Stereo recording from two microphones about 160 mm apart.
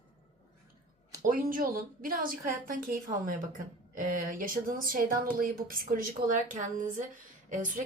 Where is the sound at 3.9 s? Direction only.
60° right (ahead or behind).